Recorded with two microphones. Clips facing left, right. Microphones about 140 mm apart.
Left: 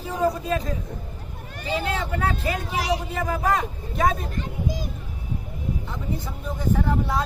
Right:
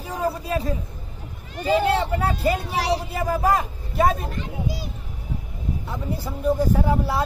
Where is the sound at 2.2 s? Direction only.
10° right (ahead or behind).